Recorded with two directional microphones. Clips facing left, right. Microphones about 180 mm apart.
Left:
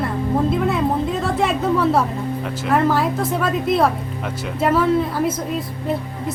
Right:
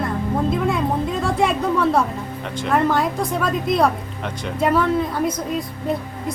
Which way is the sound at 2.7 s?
5° left (ahead or behind).